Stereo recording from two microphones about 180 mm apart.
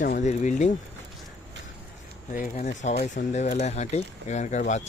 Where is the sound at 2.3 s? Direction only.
45° left (ahead or behind).